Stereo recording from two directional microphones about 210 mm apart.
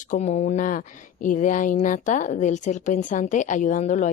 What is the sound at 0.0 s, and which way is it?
A woman's voice, 35° left (ahead or behind).